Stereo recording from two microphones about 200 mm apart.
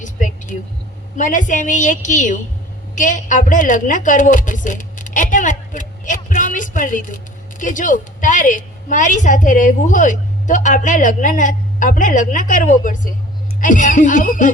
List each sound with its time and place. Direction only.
0.0 s vehicle: 40° left (ahead or behind)
1.1 s a woman's voice: 40° left (ahead or behind)